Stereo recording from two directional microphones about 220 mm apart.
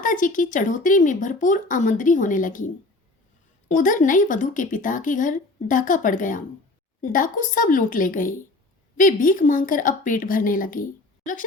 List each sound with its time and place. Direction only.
0.0 s a woman's voice: 35° left (ahead or behind)
3.7 s a woman's voice: 35° left (ahead or behind)